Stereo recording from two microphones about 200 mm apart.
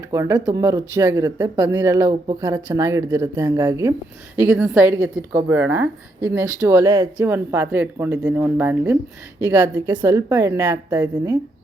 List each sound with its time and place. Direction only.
0.1 s speech: 15° right (ahead or behind)
4.4 s speech: 5° right (ahead or behind)